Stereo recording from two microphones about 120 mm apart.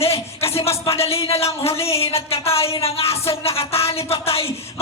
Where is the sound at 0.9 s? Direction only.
55° left (ahead or behind).